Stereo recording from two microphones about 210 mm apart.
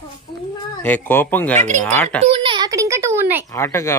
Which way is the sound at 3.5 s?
15° left (ahead or behind).